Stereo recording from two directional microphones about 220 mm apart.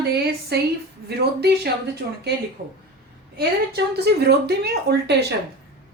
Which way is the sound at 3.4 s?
50° right (ahead or behind).